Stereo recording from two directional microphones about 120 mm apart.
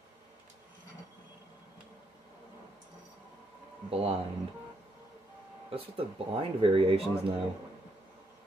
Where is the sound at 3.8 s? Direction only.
55° right (ahead or behind).